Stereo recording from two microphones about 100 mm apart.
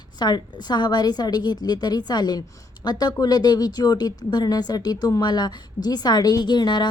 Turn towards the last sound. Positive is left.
turn(degrees=45)  # may be behind; listen again after turning